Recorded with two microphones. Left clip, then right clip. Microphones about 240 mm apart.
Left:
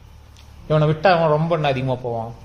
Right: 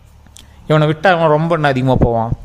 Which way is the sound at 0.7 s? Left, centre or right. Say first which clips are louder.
Right 4 dB; right.